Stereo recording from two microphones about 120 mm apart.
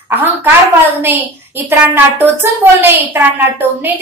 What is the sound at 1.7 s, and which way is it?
A woman's voice, 15° right (ahead or behind).